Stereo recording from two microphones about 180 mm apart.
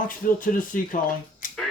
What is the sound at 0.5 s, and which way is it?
Speech, 50° left (ahead or behind).